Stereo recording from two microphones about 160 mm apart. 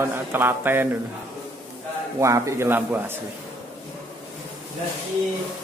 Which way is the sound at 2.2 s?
20° right (ahead or behind).